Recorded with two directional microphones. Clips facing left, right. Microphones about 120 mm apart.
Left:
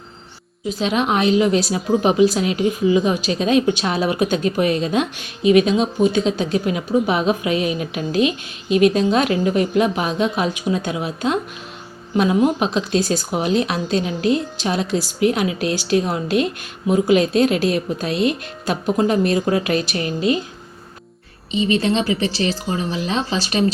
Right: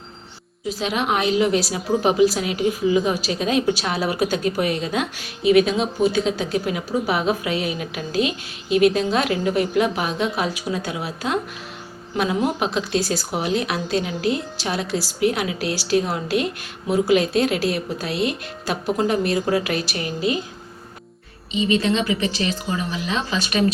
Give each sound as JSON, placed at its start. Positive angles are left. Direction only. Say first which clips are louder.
{"t": 0.7, "sound": "a woman's voice", "louder": "left 3 dB", "side_deg": 25}
{"t": 21.5, "sound": "speech", "louder": "left 2 dB", "side_deg": 35}